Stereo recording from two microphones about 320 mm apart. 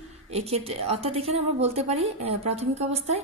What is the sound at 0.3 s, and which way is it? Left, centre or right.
A woman's voice, centre.